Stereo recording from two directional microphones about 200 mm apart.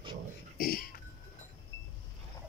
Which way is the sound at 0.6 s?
45° left (ahead or behind).